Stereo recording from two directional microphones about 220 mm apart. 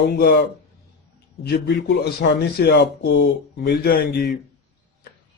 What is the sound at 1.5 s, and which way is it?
A man's voice, 50° left (ahead or behind).